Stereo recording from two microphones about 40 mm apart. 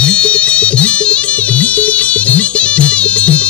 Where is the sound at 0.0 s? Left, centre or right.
Left.